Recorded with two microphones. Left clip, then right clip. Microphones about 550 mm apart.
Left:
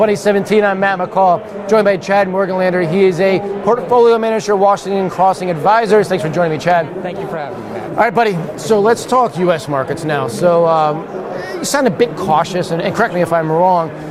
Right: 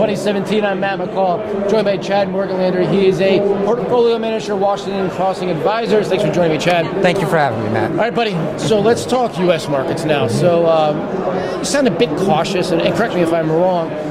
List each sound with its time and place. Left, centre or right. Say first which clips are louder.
0.0 s speech: left 4 dB; left
8.0 s speech: left 3 dB; left